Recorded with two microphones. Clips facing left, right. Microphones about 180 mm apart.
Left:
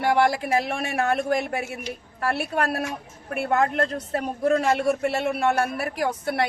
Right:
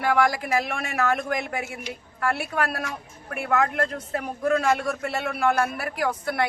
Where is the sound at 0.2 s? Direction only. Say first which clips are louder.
Left 1 dB; 30° left (ahead or behind).